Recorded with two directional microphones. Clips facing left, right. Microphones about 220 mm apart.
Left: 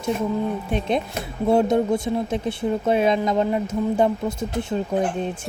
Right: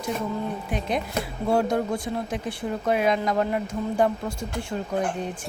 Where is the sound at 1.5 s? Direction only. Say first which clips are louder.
Left 5 dB; 20° left (ahead or behind).